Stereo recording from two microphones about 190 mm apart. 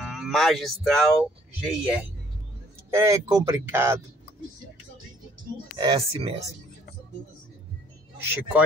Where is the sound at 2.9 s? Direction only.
15° right (ahead or behind).